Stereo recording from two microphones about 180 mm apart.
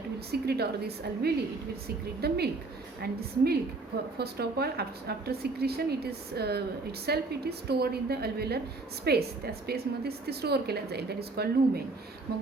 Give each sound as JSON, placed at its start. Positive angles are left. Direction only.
{"t": 0.3, "sound": "a woman's voice", "side_deg": -65}